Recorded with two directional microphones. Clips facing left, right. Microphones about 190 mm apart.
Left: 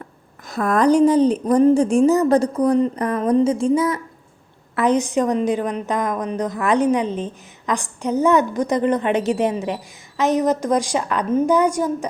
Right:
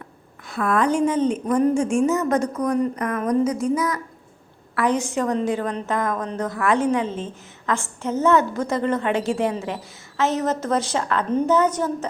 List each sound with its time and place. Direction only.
0.4 s a woman's voice: 40° left (ahead or behind); by 12.0 s 10° left (ahead or behind)